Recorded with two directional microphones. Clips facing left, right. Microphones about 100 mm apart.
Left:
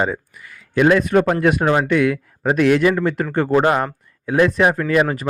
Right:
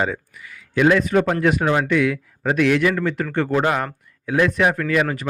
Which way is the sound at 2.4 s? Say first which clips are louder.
Left 3 dB; 35° left (ahead or behind).